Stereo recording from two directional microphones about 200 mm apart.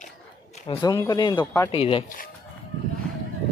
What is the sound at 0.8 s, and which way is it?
Speech, 15° left (ahead or behind).